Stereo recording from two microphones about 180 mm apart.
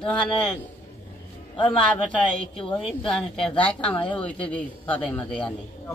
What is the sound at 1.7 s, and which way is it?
Speech, 5° left (ahead or behind).